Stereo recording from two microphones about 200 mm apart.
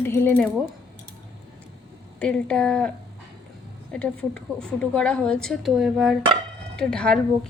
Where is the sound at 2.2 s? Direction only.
5° left (ahead or behind).